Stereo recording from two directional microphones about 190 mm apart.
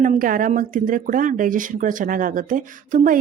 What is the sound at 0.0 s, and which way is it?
Speech, 45° right (ahead or behind).